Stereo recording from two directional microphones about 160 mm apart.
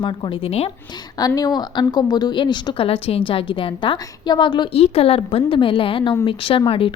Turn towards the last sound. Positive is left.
turn(degrees=35)  # may be behind; listen again after turning